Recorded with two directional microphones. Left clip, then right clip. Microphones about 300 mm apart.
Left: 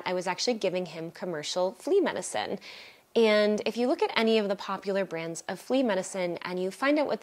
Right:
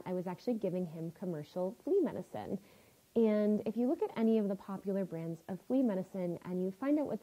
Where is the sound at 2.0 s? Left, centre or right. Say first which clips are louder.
Left 10 dB; centre.